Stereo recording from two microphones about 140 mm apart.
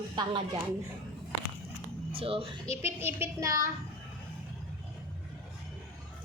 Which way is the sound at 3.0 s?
15° right (ahead or behind).